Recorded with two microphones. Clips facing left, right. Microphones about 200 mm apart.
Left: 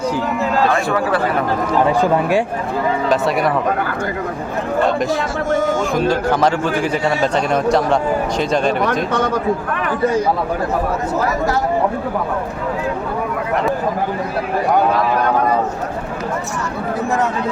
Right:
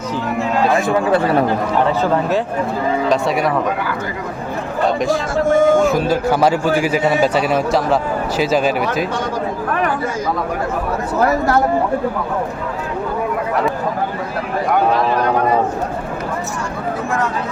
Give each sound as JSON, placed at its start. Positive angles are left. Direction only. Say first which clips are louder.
{"t": 0.9, "sound": "speech", "louder": "right 3 dB", "side_deg": -25}
{"t": 1.9, "sound": "speech", "louder": "left 1 dB", "side_deg": 15}
{"t": 3.1, "sound": "a man's voice", "louder": "left 1 dB", "side_deg": 0}
{"t": 4.9, "sound": "a man's voice", "louder": "right 1 dB", "side_deg": 0}
{"t": 5.3, "sound": "speech", "louder": "right 5 dB", "side_deg": -50}
{"t": 5.9, "sound": "a man's voice", "louder": "even", "side_deg": -5}